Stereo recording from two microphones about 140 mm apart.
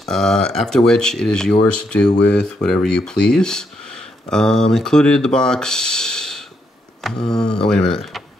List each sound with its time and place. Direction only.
0.0 s speech: 5° left (ahead or behind)